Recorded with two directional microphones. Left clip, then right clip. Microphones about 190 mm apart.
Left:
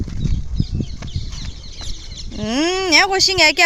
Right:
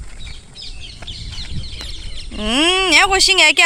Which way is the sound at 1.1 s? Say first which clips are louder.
Right 4 dB; 65° left (ahead or behind).